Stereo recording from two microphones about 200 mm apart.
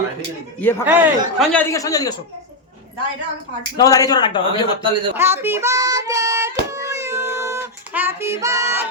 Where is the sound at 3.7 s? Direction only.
15° left (ahead or behind).